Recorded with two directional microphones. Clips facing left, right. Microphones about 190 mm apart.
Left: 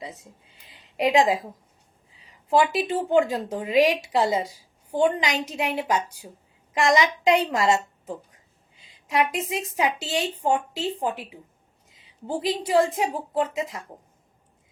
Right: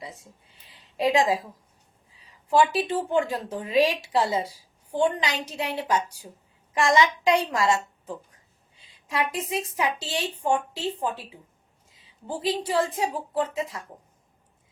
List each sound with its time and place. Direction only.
0.0 s speech: 20° left (ahead or behind)
0.7 s a sound: 20° left (ahead or behind)
2.5 s a woman's voice: 20° left (ahead or behind)